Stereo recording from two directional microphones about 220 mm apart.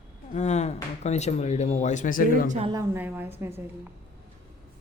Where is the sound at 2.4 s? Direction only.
30° right (ahead or behind).